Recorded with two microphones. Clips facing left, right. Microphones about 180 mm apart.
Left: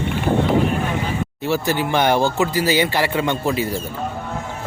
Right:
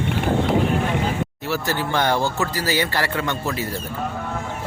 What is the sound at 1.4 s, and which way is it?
Speech, 20° left (ahead or behind).